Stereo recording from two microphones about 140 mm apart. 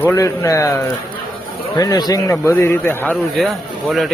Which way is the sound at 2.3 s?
15° left (ahead or behind).